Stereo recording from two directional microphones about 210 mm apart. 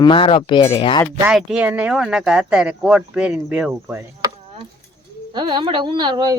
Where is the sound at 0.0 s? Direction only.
25° left (ahead or behind).